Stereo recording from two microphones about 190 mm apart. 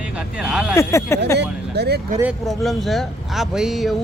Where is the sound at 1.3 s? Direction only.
60° right (ahead or behind).